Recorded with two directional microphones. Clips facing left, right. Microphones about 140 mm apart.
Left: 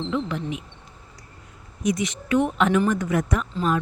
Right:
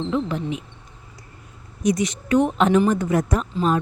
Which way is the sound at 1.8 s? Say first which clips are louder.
Right 3 dB; 40° right (ahead or behind).